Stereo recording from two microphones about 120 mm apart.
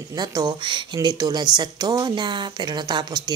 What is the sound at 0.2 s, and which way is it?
Speech, 35° right (ahead or behind).